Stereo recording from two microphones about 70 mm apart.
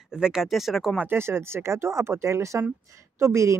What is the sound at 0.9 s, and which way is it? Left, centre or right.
Speech, right.